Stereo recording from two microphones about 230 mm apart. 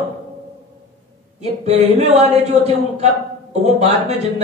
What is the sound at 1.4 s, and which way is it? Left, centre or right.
A man's voice, right.